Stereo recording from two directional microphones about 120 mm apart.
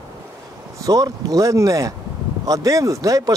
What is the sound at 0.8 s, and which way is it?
Speech, 30° right (ahead or behind).